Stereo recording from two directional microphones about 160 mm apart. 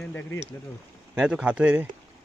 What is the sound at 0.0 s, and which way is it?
Speech, 10° left (ahead or behind).